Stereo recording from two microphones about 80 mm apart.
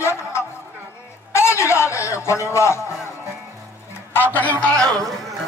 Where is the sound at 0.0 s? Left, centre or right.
Left.